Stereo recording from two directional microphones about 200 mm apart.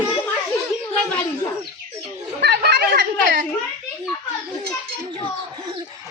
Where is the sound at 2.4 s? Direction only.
55° right (ahead or behind).